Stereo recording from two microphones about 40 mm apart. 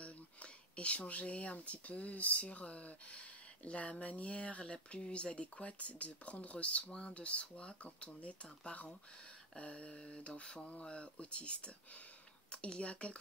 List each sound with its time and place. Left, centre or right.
0.0 s speech: left
9.9 s speech: centre